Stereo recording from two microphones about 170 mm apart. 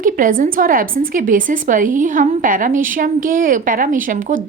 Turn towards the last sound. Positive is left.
turn(degrees=-50)  # may be behind; listen again after turning